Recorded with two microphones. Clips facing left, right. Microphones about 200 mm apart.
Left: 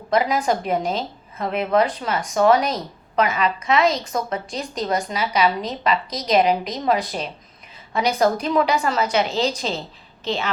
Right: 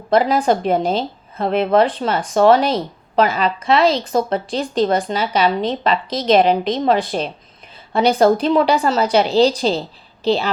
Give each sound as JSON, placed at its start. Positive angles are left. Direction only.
{"t": 0.1, "sound": "a woman's voice", "side_deg": -30}